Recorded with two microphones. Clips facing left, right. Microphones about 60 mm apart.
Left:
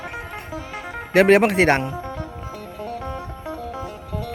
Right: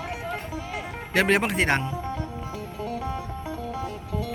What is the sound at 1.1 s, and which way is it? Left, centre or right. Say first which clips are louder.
Speech: left 8 dB; left.